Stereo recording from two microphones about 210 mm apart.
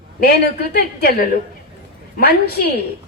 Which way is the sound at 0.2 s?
50° left (ahead or behind).